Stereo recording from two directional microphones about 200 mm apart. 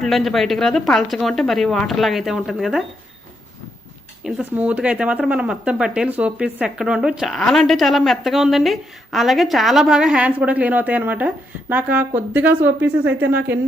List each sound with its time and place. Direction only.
0.0 s speech: centre (ahead or behind)
4.2 s a woman's voice: 5° right (ahead or behind)